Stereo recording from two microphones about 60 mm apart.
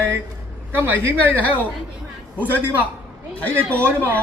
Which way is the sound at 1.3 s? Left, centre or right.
Left.